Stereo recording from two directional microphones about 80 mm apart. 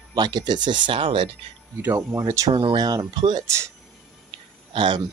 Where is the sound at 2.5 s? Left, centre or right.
Right.